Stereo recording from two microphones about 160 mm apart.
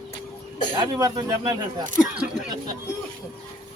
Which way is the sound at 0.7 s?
25° right (ahead or behind).